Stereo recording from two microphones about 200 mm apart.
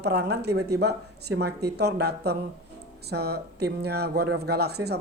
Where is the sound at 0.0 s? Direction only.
55° right (ahead or behind).